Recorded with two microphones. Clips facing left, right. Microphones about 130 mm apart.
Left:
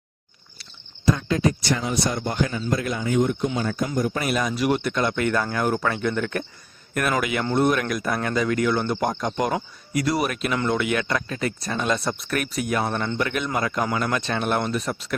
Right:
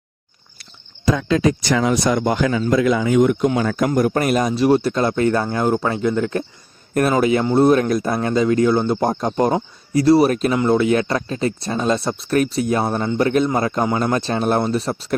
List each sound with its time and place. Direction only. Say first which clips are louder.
1.3 s speech: right 5 dB; 90° right; by 4.2 s 65° right (ahead or behind)
4.2 s speech: right 6 dB; 45° right (ahead or behind)